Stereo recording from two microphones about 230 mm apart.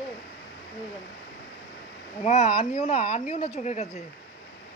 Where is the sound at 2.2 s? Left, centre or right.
Left.